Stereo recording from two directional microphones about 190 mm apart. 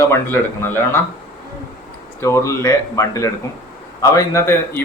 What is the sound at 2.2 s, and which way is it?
A man's voice, 15° left (ahead or behind).